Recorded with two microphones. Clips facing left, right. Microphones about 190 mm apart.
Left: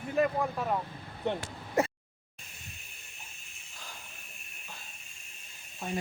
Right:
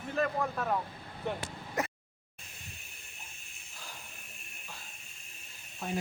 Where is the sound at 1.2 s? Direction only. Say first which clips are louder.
Left 3 dB; 25° left (ahead or behind).